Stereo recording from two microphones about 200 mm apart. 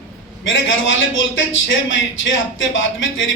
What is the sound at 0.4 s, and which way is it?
Speech, 70° left (ahead or behind).